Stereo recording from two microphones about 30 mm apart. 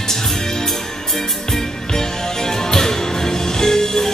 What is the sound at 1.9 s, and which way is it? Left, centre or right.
Music, centre.